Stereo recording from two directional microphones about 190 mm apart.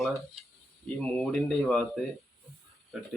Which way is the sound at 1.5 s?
Centre (ahead or behind).